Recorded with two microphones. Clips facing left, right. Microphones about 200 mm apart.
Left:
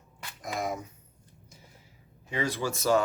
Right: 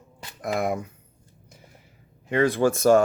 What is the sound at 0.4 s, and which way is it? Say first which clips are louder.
Speech: right 7 dB; 60° right (ahead or behind).